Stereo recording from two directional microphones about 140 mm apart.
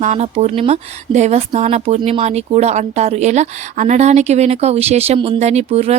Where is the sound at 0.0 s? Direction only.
55° right (ahead or behind).